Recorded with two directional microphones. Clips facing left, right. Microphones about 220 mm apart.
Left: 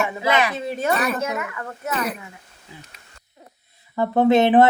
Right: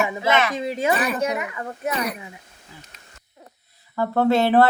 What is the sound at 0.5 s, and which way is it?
Speech, 15° right (ahead or behind).